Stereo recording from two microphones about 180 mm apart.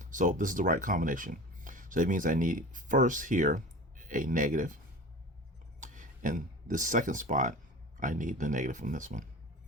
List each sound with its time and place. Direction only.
0.0 s speech: 45° right (ahead or behind)
5.8 s speech: 45° right (ahead or behind)